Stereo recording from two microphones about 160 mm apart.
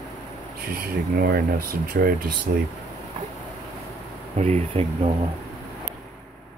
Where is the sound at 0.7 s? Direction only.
65° right (ahead or behind).